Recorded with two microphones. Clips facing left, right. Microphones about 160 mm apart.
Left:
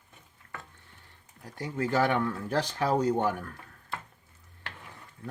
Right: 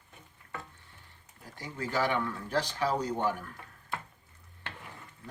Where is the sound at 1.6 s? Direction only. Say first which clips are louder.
Left 5 dB; 45° left (ahead or behind).